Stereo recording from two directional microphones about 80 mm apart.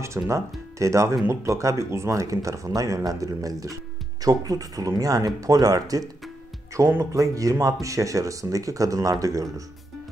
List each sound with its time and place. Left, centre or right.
0.0 s speech: right
6.9 s speech: right